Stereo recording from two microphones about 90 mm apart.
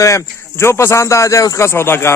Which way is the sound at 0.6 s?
30° left (ahead or behind).